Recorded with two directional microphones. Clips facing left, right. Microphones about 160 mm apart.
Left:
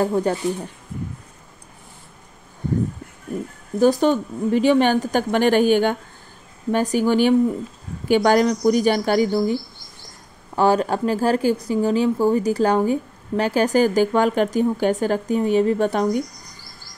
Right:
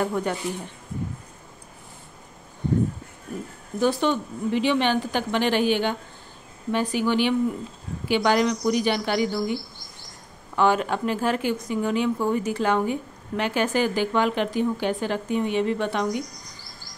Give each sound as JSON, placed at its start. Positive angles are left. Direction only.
{"t": 0.0, "sound": "speech", "side_deg": 35}
{"t": 3.8, "sound": "a woman's voice", "side_deg": 40}